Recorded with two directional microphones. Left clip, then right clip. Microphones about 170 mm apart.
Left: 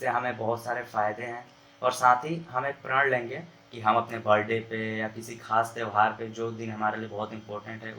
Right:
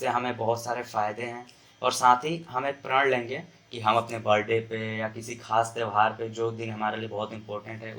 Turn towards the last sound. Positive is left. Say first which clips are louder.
# right 1 dB
turn(degrees=-25)  # may be behind; listen again after turning